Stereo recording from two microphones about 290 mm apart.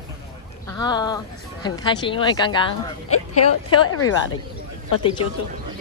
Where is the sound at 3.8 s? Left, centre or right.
Left.